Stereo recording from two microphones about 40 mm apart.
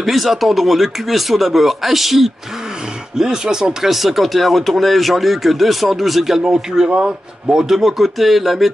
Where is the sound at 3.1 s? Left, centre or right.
Centre.